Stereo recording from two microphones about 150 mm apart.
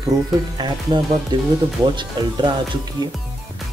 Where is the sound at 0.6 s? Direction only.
30° right (ahead or behind).